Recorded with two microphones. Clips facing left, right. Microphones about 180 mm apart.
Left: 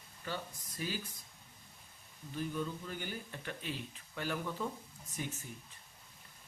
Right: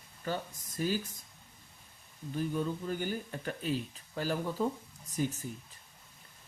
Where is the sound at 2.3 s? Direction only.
40° right (ahead or behind).